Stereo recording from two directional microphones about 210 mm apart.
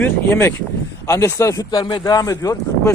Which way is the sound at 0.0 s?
10° left (ahead or behind).